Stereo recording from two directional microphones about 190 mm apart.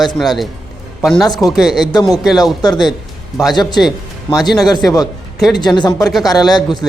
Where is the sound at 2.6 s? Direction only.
20° left (ahead or behind).